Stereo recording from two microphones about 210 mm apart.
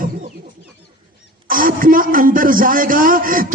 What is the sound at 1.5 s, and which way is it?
A man's voice, 40° right (ahead or behind).